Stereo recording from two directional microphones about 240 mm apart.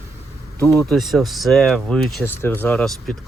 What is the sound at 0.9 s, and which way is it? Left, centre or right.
Speech, centre.